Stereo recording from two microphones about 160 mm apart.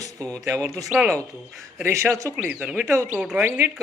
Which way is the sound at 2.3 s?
5° right (ahead or behind).